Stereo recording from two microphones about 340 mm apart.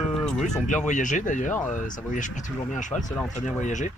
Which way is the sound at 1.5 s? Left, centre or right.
Centre.